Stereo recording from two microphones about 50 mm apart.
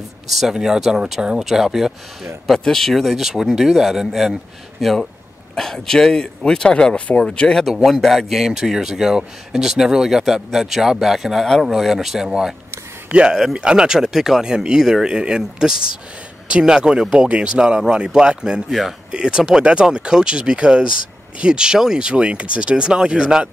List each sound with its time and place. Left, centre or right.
0.3 s speech: centre
2.5 s speech: centre
5.6 s speech: centre
7.8 s speech: centre
18.7 s speech: centre
19.1 s speech: centre